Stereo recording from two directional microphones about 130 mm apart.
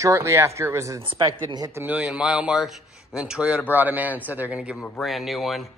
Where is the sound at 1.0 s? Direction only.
40° right (ahead or behind).